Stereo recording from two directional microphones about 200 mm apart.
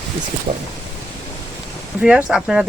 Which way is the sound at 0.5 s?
30° right (ahead or behind).